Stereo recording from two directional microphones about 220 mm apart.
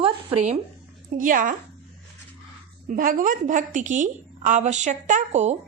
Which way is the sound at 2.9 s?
40° right (ahead or behind).